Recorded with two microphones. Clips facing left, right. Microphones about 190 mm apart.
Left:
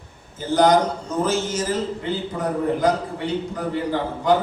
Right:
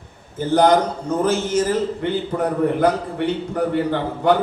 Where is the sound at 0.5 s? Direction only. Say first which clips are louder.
Right 1 dB; 55° right (ahead or behind).